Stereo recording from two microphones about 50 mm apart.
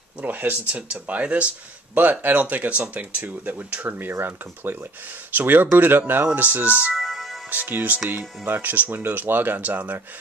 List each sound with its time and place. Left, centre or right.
0.2 s speech: right
0.7 s speech: right
4.1 s speech: right
6.2 s speech: right
6.9 s music: centre
7.4 s speech: right